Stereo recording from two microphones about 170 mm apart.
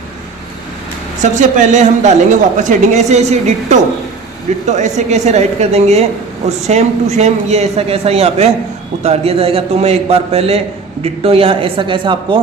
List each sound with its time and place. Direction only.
1.2 s a man's voice: 45° right (ahead or behind); by 12.4 s 30° right (ahead or behind)